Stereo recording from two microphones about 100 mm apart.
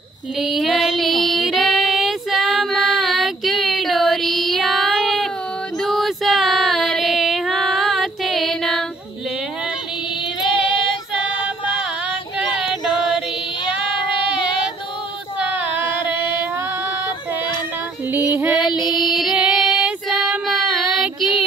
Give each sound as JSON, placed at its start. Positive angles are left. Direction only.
{"t": 0.4, "sound": "child singing", "side_deg": 0}
{"t": 5.8, "sound": "female singing", "side_deg": 0}
{"t": 11.6, "sound": "a sound", "side_deg": 60}
{"t": 15.3, "sound": "a sound", "side_deg": -15}
{"t": 18.1, "sound": "female singing", "side_deg": -25}
{"t": 18.9, "sound": "female singing", "side_deg": 0}
{"t": 20.4, "sound": "child singing", "side_deg": 0}